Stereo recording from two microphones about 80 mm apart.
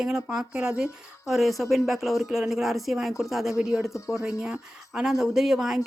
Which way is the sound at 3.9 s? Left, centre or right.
Left.